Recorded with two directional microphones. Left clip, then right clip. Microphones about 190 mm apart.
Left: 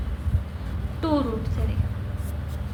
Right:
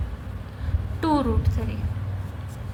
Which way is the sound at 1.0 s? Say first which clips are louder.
Right 2 dB; 40° right (ahead or behind).